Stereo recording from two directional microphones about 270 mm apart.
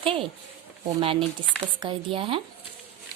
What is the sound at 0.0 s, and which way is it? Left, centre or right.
A woman's voice, centre.